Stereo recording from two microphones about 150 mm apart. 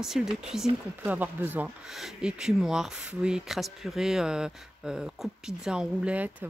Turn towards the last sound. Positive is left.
turn(degrees=-10)  # may be behind; listen again after turning